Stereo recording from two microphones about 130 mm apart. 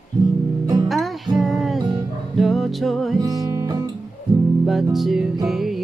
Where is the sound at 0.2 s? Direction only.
30° right (ahead or behind).